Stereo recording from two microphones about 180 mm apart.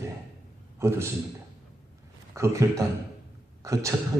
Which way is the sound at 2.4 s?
15° right (ahead or behind).